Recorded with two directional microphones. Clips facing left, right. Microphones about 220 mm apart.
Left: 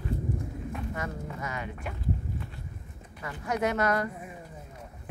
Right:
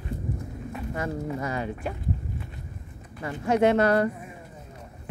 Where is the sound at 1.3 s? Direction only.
35° right (ahead or behind).